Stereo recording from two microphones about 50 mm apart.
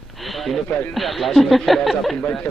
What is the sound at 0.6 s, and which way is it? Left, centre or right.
Speech, left.